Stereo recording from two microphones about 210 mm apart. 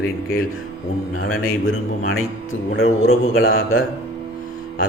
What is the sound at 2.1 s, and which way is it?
Speech, 75° left (ahead or behind).